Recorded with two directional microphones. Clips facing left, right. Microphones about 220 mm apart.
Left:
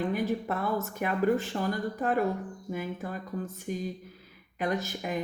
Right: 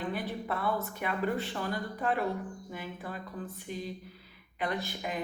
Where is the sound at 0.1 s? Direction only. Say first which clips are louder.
Left 5 dB; 45° left (ahead or behind).